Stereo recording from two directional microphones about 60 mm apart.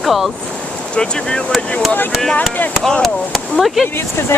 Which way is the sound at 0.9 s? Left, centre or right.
Centre.